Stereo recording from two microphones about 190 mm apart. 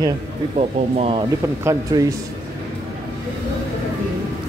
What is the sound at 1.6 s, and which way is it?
Speech, 15° right (ahead or behind).